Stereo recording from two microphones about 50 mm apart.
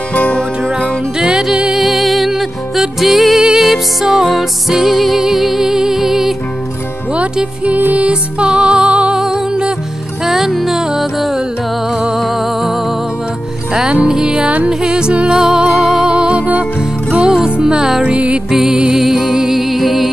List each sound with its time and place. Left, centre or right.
0.1 s music: left
1.1 s music: centre
7.7 s music: right
8.1 s music: centre
10.2 s music: centre
14.0 s music: centre
18.5 s music: centre